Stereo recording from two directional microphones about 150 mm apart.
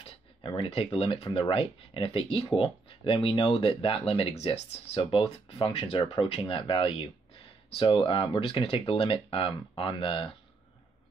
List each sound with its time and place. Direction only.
0.0 s speech: 35° left (ahead or behind)